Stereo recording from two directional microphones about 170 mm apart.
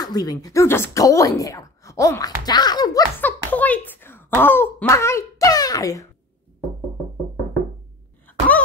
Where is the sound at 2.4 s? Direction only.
25° left (ahead or behind).